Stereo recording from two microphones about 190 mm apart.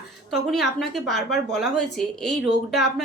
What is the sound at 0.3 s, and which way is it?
A woman's voice, centre (ahead or behind).